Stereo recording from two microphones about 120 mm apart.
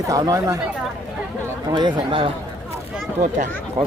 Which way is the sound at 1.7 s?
40° right (ahead or behind).